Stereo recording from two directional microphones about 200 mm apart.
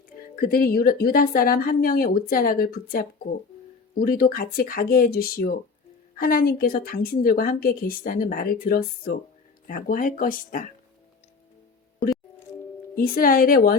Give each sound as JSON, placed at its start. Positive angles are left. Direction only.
{"t": 0.3, "sound": "a woman's voice", "side_deg": 45}
{"t": 13.0, "sound": "a woman's voice", "side_deg": 45}